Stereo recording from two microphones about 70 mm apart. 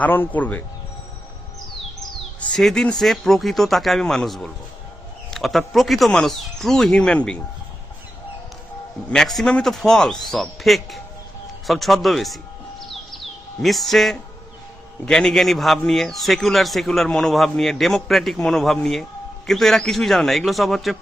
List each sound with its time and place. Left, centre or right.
0.0 s speech: left
2.5 s a man's voice: centre
9.1 s a man's voice: centre
12.8 s bird: centre
15.0 s a man's voice: centre